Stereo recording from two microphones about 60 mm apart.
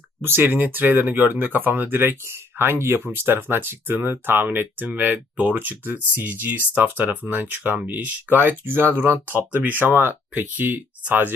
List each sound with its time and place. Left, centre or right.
0.2 s speech: right